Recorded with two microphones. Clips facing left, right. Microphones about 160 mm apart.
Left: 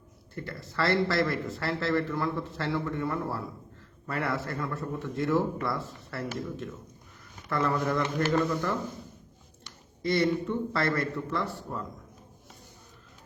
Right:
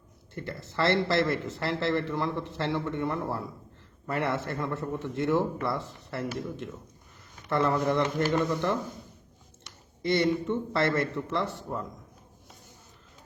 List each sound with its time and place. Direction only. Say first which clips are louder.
0.3 s speech: right 1 dB; 20° right (ahead or behind)
10.0 s speech: right 1 dB; 20° right (ahead or behind)